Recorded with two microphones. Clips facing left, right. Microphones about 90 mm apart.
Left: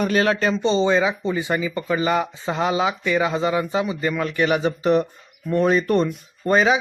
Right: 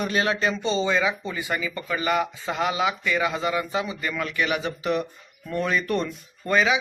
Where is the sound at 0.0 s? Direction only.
40° left (ahead or behind).